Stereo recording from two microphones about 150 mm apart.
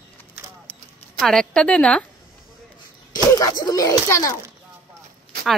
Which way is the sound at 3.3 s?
25° left (ahead or behind).